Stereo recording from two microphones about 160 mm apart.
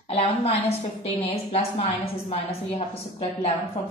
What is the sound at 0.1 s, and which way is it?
A woman's voice, 35° left (ahead or behind).